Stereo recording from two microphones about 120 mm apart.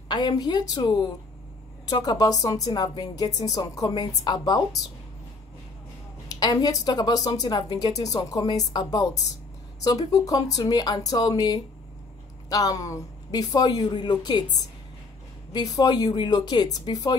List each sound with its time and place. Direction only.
0.1 s speech: 35° left (ahead or behind)
6.2 s speech: 35° left (ahead or behind)